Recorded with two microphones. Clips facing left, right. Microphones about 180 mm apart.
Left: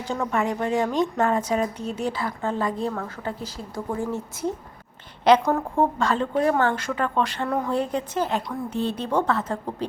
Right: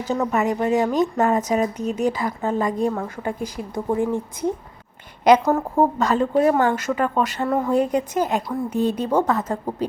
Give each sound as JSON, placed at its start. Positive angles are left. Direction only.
{"t": 0.3, "sound": "a woman's voice", "side_deg": -5}